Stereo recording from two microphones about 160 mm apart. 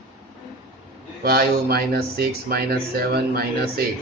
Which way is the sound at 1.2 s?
75° right (ahead or behind).